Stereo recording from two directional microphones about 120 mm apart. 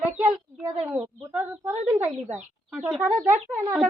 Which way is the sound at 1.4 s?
15° right (ahead or behind).